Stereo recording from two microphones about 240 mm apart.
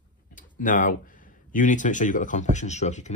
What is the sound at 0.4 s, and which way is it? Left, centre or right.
Tick-tock, left.